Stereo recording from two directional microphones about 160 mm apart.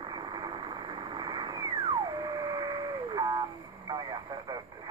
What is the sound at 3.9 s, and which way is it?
Speech, 25° right (ahead or behind).